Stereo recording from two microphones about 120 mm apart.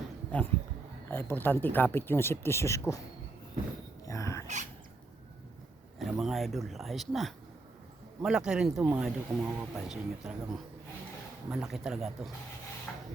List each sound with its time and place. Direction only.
0.3 s speech: 10° left (ahead or behind)
4.0 s a sound: 25° left (ahead or behind)
6.0 s speech: centre (ahead or behind)
12.9 s rub: 10° left (ahead or behind)